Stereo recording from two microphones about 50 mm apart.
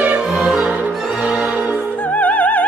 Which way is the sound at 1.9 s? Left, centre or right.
Left.